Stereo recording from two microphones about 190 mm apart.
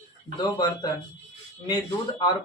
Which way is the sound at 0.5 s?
20° left (ahead or behind).